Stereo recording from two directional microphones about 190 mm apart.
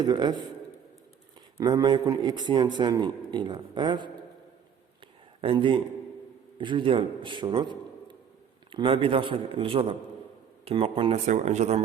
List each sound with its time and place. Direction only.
0.0 s a man's voice: 20° right (ahead or behind)
1.5 s a man's voice: 20° right (ahead or behind)
5.4 s a man's voice: 25° right (ahead or behind)